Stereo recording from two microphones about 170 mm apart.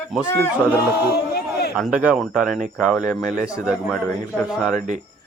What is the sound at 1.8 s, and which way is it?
Speech, 5° right (ahead or behind).